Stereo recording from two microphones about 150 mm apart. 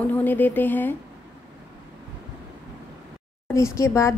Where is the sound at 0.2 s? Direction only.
10° left (ahead or behind).